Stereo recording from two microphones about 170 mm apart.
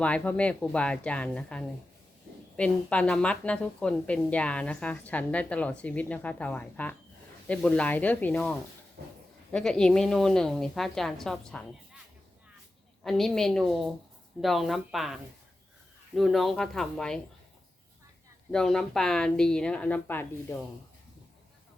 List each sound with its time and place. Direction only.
0.0 s a woman's voice: 5° left (ahead or behind)
9.0 s speech: 70° right (ahead or behind)
9.5 s a woman's voice: 5° left (ahead or behind)
13.0 s a woman's voice: centre (ahead or behind)
18.5 s a woman's voice: 5° left (ahead or behind)